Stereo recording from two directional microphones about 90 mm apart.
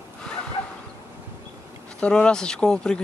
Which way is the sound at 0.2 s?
10° left (ahead or behind).